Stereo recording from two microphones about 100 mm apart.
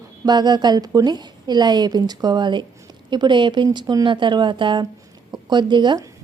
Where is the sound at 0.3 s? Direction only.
45° right (ahead or behind).